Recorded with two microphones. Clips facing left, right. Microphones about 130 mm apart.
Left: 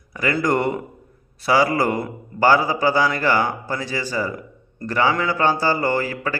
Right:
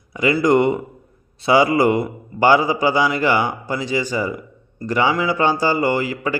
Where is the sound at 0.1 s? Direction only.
15° right (ahead or behind).